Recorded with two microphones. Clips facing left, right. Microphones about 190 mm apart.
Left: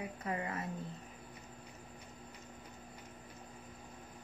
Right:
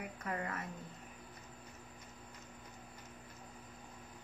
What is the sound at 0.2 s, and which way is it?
Speech, 20° left (ahead or behind).